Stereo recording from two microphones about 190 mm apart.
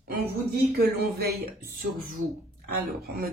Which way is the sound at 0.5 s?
55° right (ahead or behind).